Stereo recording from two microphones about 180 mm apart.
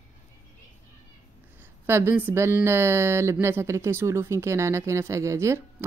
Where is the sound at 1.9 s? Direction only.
15° right (ahead or behind).